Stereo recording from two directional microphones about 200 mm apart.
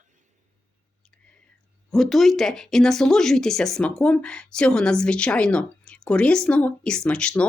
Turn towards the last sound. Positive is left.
turn(degrees=5)  # may be behind; listen again after turning